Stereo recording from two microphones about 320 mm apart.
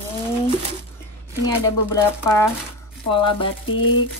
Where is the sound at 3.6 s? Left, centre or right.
Left.